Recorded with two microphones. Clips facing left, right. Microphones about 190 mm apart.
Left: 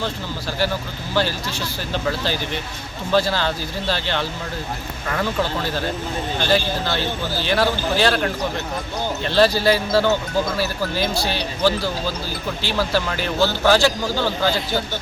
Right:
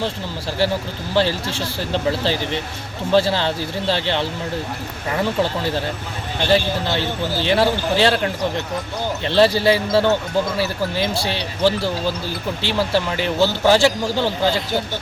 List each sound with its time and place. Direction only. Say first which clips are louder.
1.1 s a man's voice: right 3 dB; 25° right (ahead or behind)